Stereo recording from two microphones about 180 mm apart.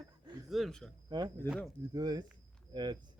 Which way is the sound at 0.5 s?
Centre (ahead or behind).